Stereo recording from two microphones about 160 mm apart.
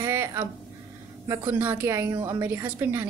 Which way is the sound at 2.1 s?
25° right (ahead or behind).